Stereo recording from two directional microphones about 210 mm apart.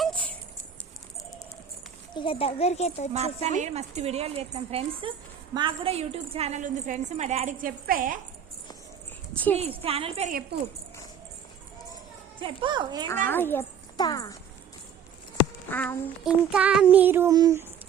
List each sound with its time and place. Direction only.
0.0 s a sound: 5° left (ahead or behind)
2.1 s a child's voice: 25° left (ahead or behind)
3.1 s a woman's voice: 30° right (ahead or behind)
9.6 s a woman's voice: 25° right (ahead or behind)
12.4 s a woman's voice: 20° right (ahead or behind)
13.2 s a child's voice: 10° left (ahead or behind)
15.7 s a child's voice: 10° left (ahead or behind)
16.2 s child singing: 5° right (ahead or behind)